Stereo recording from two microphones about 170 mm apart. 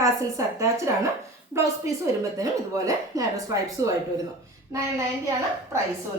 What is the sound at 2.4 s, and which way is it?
Speech, 20° right (ahead or behind).